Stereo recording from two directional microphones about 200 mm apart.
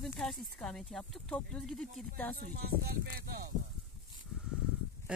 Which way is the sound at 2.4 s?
50° right (ahead or behind).